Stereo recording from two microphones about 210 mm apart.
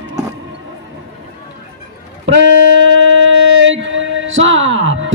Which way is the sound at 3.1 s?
65° right (ahead or behind).